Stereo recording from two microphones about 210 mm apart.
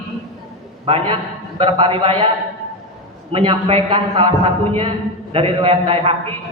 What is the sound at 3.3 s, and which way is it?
A man's voice, 25° right (ahead or behind).